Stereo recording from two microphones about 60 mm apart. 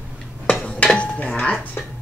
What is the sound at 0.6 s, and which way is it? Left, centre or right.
Dishes, centre.